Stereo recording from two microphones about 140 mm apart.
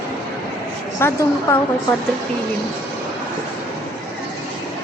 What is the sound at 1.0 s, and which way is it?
Speech, 15° left (ahead or behind).